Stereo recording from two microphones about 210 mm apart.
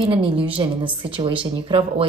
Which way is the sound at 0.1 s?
25° right (ahead or behind).